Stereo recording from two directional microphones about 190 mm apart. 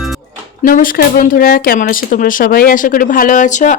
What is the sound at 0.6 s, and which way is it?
Speech, 50° left (ahead or behind).